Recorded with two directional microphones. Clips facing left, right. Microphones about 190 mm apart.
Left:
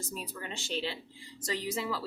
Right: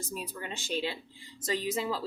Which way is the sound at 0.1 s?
15° right (ahead or behind).